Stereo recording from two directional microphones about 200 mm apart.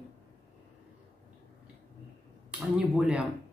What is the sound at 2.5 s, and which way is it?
Speech, 5° right (ahead or behind).